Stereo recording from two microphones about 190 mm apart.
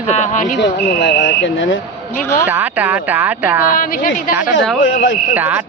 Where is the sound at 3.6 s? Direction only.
45° left (ahead or behind).